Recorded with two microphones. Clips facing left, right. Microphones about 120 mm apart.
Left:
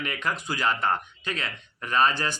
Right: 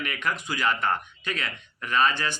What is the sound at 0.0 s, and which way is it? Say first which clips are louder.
Speech: even; 30° left (ahead or behind).